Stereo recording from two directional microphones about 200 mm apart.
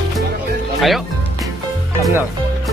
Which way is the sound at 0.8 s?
Centre (ahead or behind).